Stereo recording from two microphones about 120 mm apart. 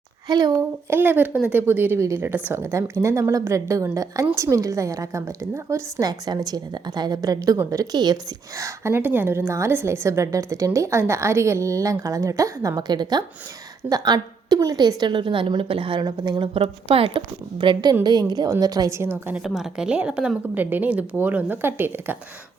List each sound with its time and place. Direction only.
0.3 s a woman's voice: 35° right (ahead or behind)
0.6 s a woman's voice: 15° right (ahead or behind); by 16.5 s 40° right (ahead or behind)
16.6 s a woman's voice: 50° right (ahead or behind); by 19.4 s 15° right (ahead or behind)
19.4 s a woman's voice: centre (ahead or behind); by 22.2 s 15° right (ahead or behind)